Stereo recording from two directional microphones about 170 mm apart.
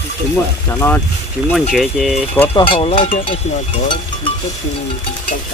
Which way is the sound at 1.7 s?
Centre (ahead or behind).